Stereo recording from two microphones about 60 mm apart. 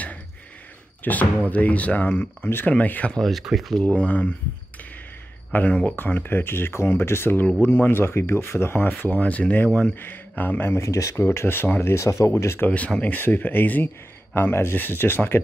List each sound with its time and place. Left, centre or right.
1.0 s speech: left
3.1 s speech: centre
3.8 s speech: left
5.5 s speech: left
9.0 s speech: left
10.9 s speech: left
11.2 s speech: left
11.8 s speech: left
12.3 s speech: left
12.6 s speech: left